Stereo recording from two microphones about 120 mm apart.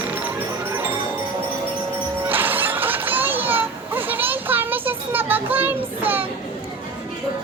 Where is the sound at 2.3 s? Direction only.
15° right (ahead or behind).